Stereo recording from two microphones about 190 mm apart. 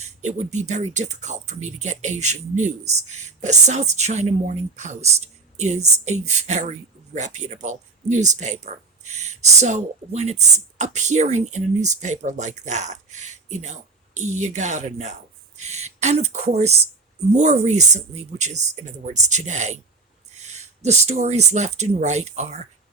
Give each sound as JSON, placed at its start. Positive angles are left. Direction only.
{"t": 0.0, "sound": "speech", "side_deg": -35}